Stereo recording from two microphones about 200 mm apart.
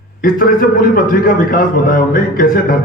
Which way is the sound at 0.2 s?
45° left (ahead or behind).